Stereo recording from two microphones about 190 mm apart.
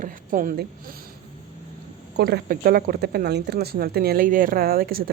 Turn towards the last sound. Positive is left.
turn(degrees=-50)  # may be behind; listen again after turning